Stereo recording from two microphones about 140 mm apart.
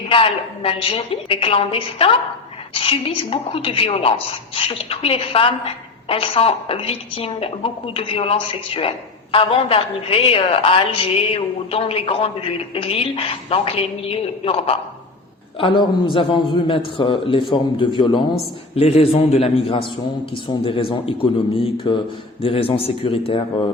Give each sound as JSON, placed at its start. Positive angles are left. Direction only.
{"t": 0.1, "sound": "a woman's voice", "side_deg": 40}
{"t": 18.7, "sound": "a man's voice", "side_deg": 45}